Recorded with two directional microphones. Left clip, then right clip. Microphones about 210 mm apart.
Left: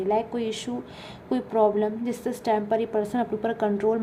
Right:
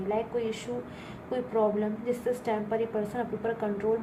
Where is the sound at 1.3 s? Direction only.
50° left (ahead or behind).